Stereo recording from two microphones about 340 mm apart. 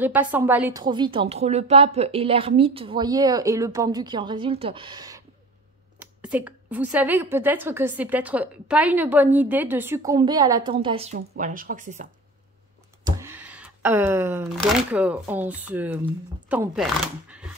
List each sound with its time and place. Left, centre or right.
0.0 s a woman's voice: centre; by 12.1 s right
13.0 s speech: centre